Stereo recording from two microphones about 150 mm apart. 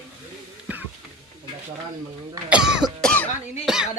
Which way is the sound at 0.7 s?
10° right (ahead or behind).